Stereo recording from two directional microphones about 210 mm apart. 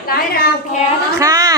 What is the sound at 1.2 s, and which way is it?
Speech, 15° right (ahead or behind).